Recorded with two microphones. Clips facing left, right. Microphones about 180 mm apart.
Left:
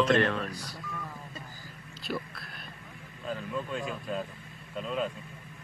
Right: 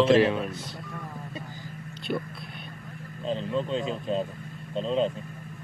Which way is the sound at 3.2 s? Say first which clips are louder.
Right 6 dB; 25° right (ahead or behind).